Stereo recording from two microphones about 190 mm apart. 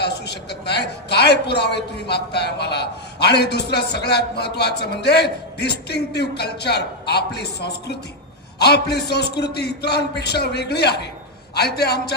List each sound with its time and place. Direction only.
0.0 s a woman's voice: 60° left (ahead or behind)